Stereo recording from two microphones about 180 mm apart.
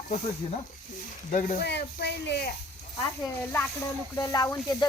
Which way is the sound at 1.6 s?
65° left (ahead or behind).